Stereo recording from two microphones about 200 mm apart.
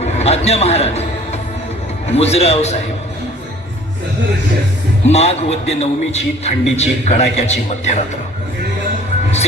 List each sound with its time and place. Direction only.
0.0 s a man's voice: 30° left (ahead or behind)
5.0 s a man's voice: 35° left (ahead or behind)